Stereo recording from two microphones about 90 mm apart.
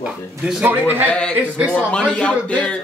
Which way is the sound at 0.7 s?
25° right (ahead or behind).